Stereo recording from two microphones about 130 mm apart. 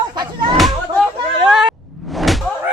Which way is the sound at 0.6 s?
Centre (ahead or behind).